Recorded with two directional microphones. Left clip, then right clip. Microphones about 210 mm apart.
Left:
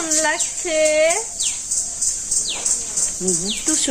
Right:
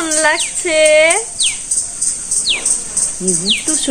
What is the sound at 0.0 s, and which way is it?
Speech, 20° right (ahead or behind).